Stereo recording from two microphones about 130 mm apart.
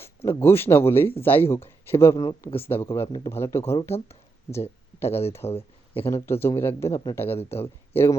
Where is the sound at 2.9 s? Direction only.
30° left (ahead or behind).